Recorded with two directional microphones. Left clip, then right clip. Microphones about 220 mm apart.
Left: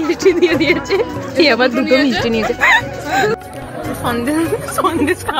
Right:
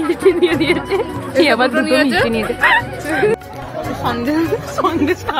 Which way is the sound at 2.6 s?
35° left (ahead or behind).